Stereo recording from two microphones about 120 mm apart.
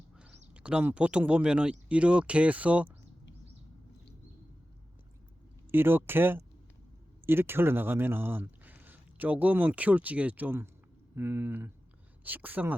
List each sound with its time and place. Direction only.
0.2 s speech: 10° right (ahead or behind)
5.7 s speech: 20° right (ahead or behind)